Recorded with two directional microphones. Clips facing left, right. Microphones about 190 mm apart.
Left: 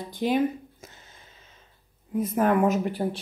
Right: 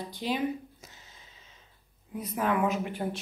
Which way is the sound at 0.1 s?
50° left (ahead or behind).